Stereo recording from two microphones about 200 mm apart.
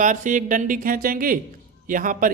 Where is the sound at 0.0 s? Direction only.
40° right (ahead or behind).